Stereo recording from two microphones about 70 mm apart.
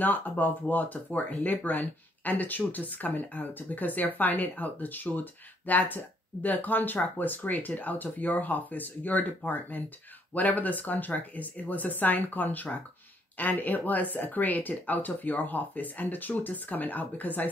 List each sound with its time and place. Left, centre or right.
0.0 s speech: left